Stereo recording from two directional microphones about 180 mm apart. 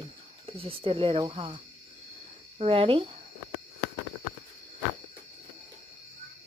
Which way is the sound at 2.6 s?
30° right (ahead or behind).